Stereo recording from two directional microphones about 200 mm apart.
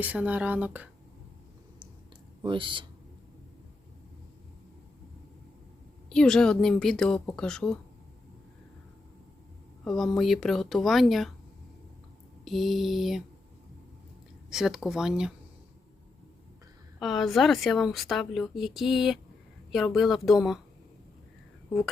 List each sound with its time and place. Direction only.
0.0 s speech: 5° right (ahead or behind)
2.4 s speech: 25° right (ahead or behind)
6.1 s a woman's voice: 5° left (ahead or behind)
9.8 s a woman's voice: centre (ahead or behind)
12.5 s a woman's voice: centre (ahead or behind)
14.5 s a woman's voice: centre (ahead or behind)
17.0 s a woman's voice: centre (ahead or behind)